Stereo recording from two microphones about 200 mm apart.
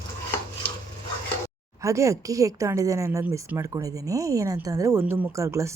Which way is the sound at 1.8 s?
15° right (ahead or behind).